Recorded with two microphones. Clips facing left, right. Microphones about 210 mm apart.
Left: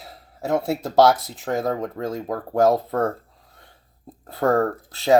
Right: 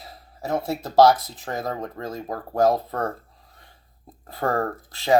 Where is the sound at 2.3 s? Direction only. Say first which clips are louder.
Left 2 dB; 55° left (ahead or behind).